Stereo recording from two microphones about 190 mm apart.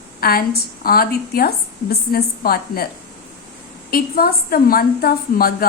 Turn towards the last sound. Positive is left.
turn(degrees=55)  # may be behind; listen again after turning